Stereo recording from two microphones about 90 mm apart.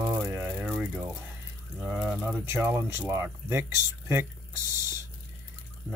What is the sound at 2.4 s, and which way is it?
Speech, 25° right (ahead or behind).